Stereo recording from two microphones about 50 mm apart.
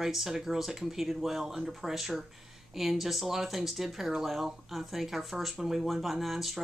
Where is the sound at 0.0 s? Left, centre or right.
Centre.